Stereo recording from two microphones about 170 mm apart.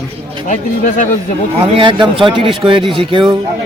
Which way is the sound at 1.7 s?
30° right (ahead or behind).